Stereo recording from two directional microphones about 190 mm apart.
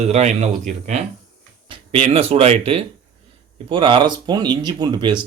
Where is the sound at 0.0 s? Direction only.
35° right (ahead or behind).